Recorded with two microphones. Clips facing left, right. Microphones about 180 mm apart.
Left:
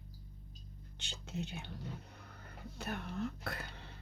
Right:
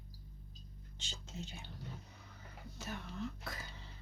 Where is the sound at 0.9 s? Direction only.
65° left (ahead or behind).